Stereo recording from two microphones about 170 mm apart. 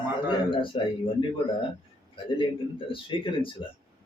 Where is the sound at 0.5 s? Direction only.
30° left (ahead or behind).